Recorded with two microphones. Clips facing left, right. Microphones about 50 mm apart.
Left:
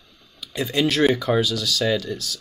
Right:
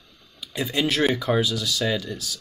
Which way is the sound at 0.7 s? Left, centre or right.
Centre.